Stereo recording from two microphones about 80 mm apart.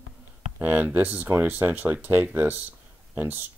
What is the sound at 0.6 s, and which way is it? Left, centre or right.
Speech, centre.